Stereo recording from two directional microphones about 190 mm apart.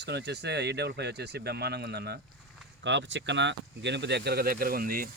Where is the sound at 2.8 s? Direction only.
70° right (ahead or behind); by 5.1 s 50° right (ahead or behind).